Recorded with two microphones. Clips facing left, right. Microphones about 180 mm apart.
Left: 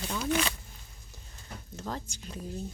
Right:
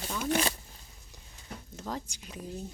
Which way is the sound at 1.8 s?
10° right (ahead or behind).